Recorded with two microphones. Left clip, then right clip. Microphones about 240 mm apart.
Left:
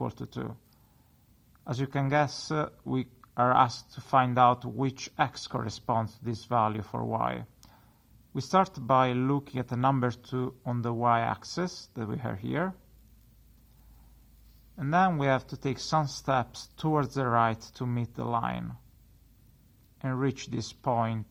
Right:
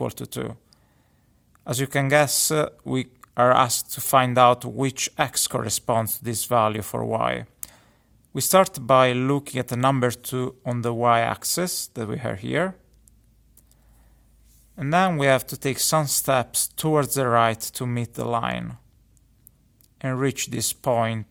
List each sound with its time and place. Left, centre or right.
0.0 s speech: right
14.8 s speech: right
20.0 s speech: right